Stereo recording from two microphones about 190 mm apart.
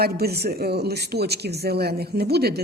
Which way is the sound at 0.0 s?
55° right (ahead or behind).